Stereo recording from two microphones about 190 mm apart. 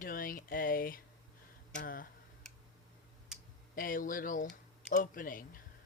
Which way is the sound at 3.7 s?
45° left (ahead or behind).